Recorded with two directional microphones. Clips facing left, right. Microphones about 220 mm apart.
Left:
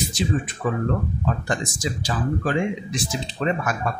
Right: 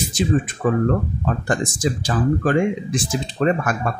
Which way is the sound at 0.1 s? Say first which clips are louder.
Right 5 dB; 50° right (ahead or behind).